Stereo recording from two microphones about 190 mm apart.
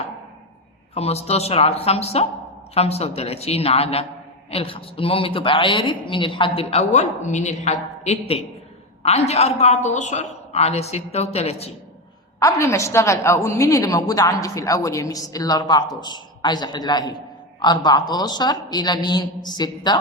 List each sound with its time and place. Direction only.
0.9 s a woman's voice: 35° left (ahead or behind)
12.4 s a woman's voice: 15° left (ahead or behind)